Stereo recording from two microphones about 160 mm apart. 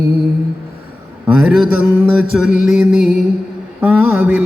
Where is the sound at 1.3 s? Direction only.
5° right (ahead or behind).